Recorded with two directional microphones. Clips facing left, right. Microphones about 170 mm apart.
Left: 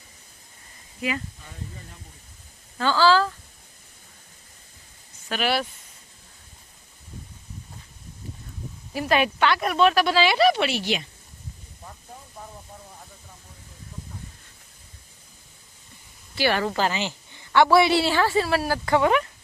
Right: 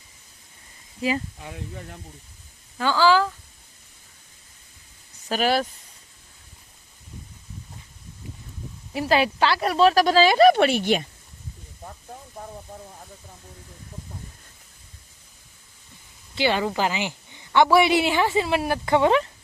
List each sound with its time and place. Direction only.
1.4 s speech: 75° right (ahead or behind)
2.7 s a woman's voice: 15° right (ahead or behind)
5.3 s speech: 40° right (ahead or behind)
8.9 s speech: 25° right (ahead or behind); by 11.0 s 50° right (ahead or behind)
16.3 s a woman's voice: 20° right (ahead or behind)